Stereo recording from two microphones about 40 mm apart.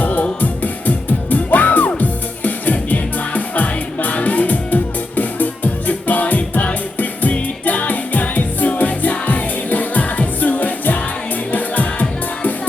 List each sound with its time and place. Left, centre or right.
0.0 s music: left